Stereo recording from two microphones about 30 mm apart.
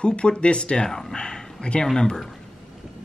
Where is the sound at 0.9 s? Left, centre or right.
Centre.